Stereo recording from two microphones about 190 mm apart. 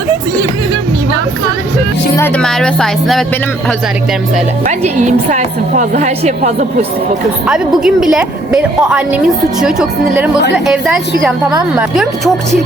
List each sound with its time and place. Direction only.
2.1 s a woman's voice: 10° left (ahead or behind)
4.6 s a woman's voice: 40° right (ahead or behind)
7.4 s a woman's voice: 5° right (ahead or behind)